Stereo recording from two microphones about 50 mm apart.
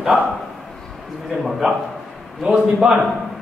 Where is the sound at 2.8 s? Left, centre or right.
Centre.